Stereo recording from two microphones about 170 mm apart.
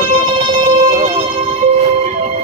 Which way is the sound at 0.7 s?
45° right (ahead or behind).